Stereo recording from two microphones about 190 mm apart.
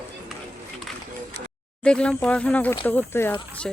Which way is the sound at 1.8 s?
5° left (ahead or behind).